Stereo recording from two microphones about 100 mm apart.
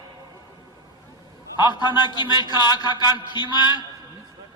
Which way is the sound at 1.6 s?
45° left (ahead or behind).